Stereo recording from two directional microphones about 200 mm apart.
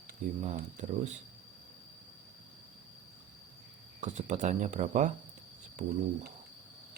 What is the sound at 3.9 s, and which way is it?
Speech, 35° right (ahead or behind).